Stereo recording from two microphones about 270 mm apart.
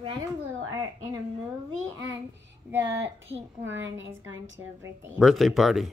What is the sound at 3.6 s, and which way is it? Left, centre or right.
Speech, right.